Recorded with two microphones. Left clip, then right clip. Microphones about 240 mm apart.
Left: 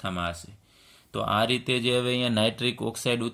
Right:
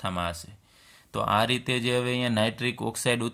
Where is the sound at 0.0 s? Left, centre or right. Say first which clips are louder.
Right 1 dB; right.